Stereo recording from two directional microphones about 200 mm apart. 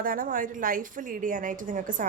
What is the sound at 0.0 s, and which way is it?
A woman's voice, 45° right (ahead or behind).